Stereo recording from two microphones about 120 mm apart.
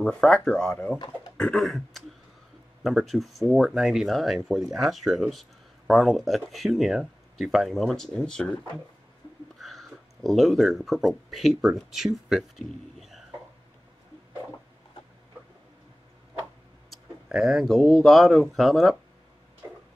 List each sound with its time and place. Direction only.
0.0 s speech: 5° left (ahead or behind)
0.9 s speech: 35° left (ahead or behind)
1.3 s a sound: 5° left (ahead or behind)
2.8 s speech: centre (ahead or behind)
9.6 s speech: centre (ahead or behind)
16.9 s speech: centre (ahead or behind)